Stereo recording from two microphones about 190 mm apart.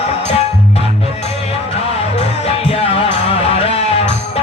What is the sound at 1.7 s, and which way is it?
Music, 30° left (ahead or behind).